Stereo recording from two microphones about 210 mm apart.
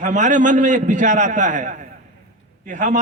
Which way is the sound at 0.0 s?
35° right (ahead or behind).